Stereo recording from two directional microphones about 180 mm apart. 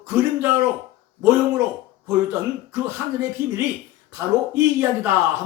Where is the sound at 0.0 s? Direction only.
10° right (ahead or behind).